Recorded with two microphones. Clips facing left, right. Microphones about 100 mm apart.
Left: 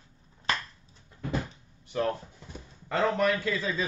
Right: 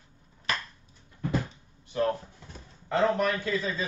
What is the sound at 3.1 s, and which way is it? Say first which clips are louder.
Speech: left 1 dB; 25° right (ahead or behind).